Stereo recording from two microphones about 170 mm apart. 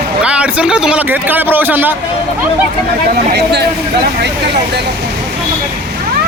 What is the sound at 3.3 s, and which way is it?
Speech, 80° right.